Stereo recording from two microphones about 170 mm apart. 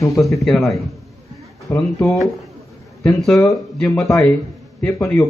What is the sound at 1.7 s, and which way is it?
Speech, 15° left (ahead or behind).